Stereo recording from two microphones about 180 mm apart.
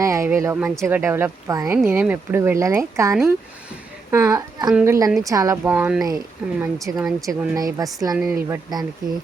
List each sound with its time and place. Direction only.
0.0 s a woman's voice: 15° right (ahead or behind)
5.7 s speech: 5° right (ahead or behind)
6.6 s speech: 15° right (ahead or behind)
8.1 s speech: 5° right (ahead or behind)
8.4 s speech: 15° right (ahead or behind)